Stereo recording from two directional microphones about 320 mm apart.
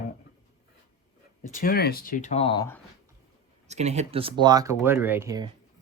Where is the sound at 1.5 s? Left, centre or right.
Left; by 2.8 s centre.